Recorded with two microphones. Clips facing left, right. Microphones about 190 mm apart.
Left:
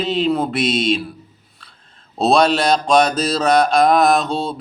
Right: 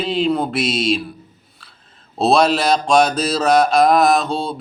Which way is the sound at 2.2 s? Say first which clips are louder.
Even; centre (ahead or behind).